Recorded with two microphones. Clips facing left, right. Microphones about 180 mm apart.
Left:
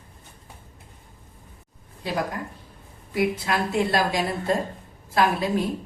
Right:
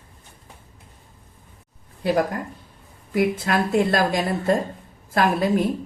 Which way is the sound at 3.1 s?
50° right (ahead or behind).